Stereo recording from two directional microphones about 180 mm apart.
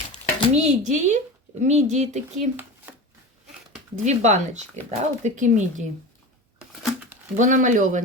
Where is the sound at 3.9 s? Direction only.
40° right (ahead or behind).